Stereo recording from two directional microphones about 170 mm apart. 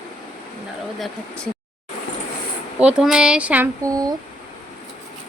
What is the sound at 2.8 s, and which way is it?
Speech, 5° right (ahead or behind).